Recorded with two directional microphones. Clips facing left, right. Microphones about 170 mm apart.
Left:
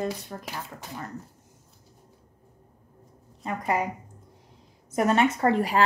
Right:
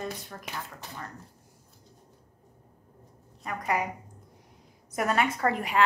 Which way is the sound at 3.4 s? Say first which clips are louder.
Left 3 dB; 25° left (ahead or behind).